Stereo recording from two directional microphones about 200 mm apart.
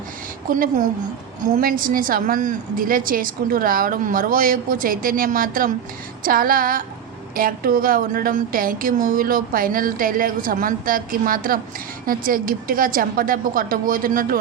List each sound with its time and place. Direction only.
0.5 s a woman's voice: 40° right (ahead or behind)